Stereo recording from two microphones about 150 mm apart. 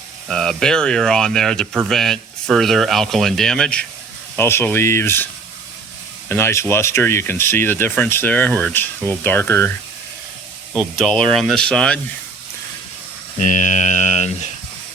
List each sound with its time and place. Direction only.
0.3 s speech: 5° left (ahead or behind)
10.8 s speech: centre (ahead or behind)
13.4 s speech: 55° left (ahead or behind)